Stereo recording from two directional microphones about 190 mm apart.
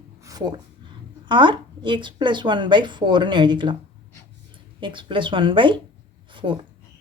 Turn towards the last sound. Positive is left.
turn(degrees=-25)  # may be behind; listen again after turning